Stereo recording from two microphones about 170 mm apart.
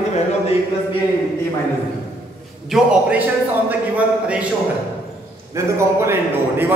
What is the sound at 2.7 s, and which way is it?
A man's voice, 5° right (ahead or behind).